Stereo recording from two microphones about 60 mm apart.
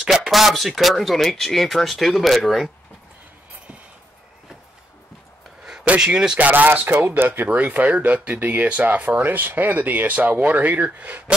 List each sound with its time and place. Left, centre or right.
0.0 s speech: centre
5.9 s speech: centre; by 7.4 s right
7.4 s speech: right